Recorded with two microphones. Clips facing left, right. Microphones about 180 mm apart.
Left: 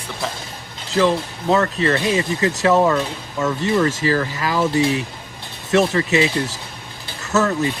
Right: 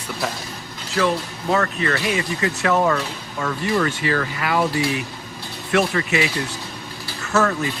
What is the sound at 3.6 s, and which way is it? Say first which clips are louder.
Speech: left 2 dB; 35° left (ahead or behind).